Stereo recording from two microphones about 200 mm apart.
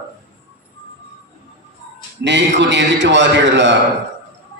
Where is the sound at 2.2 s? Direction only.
60° right (ahead or behind).